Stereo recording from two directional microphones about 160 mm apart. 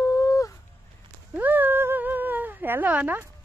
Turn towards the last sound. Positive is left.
turn(degrees=-10)  # may be behind; listen again after turning